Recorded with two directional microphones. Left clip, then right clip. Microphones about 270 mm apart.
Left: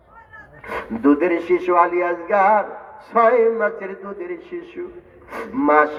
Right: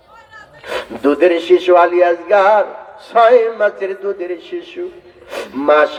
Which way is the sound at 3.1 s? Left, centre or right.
Right.